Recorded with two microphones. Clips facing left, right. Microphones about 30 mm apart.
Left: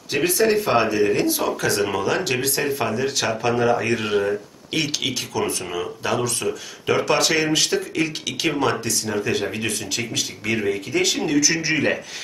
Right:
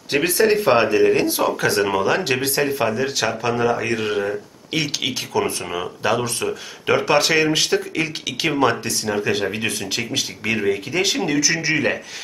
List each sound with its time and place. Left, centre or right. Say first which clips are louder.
0.1 s speech: right 2 dB; right; by 5.2 s centre
5.3 s speech: right 2 dB; right; by 12.0 s centre